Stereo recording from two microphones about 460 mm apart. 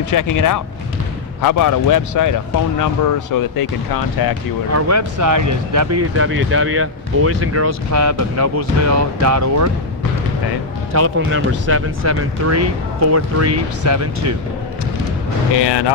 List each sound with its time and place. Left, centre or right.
0.1 s speech: left
4.7 s speech: right
10.9 s speech: right
15.5 s speech: left